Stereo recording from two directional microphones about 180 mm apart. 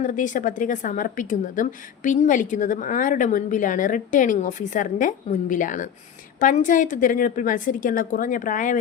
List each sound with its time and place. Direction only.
0.0 s a woman's voice: 45° left (ahead or behind)